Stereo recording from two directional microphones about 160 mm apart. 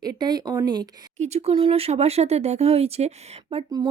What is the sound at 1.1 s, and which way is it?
Speech, 45° right (ahead or behind).